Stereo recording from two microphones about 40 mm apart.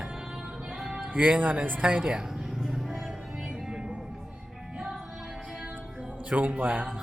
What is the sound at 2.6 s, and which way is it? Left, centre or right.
Music, centre.